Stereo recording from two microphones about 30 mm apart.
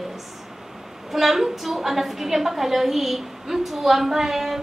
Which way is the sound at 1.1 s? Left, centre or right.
Centre.